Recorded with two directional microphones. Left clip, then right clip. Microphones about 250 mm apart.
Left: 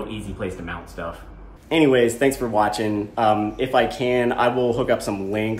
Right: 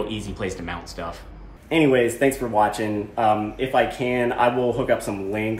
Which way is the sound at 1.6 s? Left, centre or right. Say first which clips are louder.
Left 1 dB; centre.